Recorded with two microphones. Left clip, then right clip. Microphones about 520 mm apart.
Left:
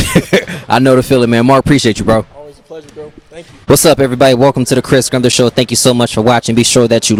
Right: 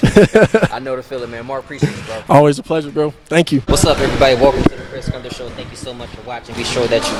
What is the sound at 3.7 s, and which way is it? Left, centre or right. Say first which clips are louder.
Speech: left 9 dB; left.